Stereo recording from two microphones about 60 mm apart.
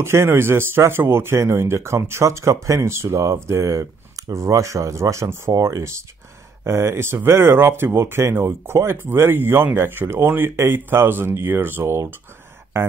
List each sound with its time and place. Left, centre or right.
0.0 s speech: right
2.9 s speech: right
6.6 s speech: right